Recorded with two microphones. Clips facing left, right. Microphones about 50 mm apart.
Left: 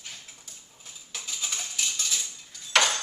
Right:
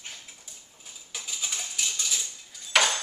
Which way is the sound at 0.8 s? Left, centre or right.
Centre.